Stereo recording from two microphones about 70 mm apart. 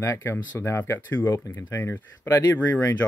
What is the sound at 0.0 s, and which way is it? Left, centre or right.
Speech, left.